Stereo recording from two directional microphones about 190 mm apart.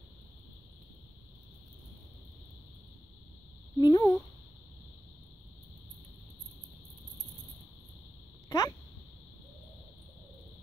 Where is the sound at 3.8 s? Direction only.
20° left (ahead or behind).